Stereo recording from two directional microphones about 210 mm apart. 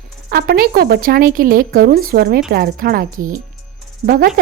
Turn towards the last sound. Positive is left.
turn(degrees=-45)  # may be behind; listen again after turning